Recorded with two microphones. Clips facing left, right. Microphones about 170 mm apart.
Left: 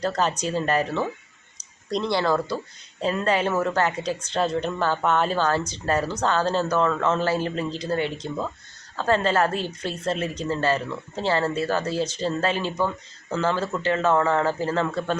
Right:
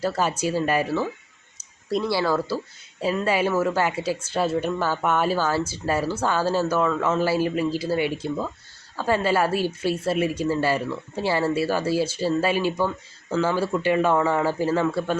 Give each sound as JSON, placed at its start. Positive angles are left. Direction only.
{"t": 0.0, "sound": "speech", "side_deg": -10}